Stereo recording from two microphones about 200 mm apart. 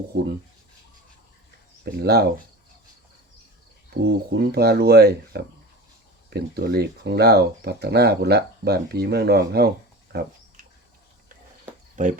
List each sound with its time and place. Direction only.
1.8 s speech: 55° right (ahead or behind)
4.0 s speech: 55° right (ahead or behind)
12.0 s speech: 40° right (ahead or behind)